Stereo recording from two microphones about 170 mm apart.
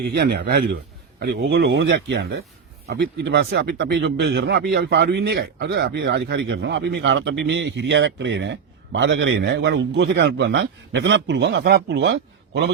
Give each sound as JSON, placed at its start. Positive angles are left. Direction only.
{"t": 0.1, "sound": "speech", "side_deg": -70}
{"t": 1.2, "sound": "speech", "side_deg": -75}
{"t": 2.8, "sound": "speech", "side_deg": -75}